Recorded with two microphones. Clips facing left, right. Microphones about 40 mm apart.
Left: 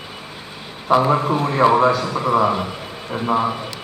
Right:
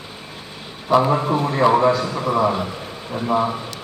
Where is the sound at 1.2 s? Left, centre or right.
Centre.